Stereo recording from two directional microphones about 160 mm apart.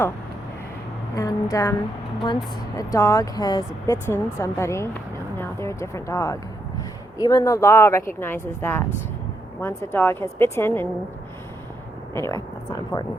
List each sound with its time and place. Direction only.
1.1 s speech: 20° left (ahead or behind)
3.9 s a woman's voice: 15° left (ahead or behind)
12.1 s speech: 15° left (ahead or behind)